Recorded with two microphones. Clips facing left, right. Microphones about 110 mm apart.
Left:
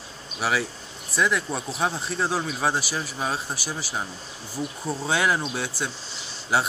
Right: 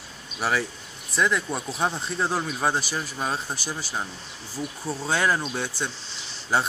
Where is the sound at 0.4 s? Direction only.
5° left (ahead or behind).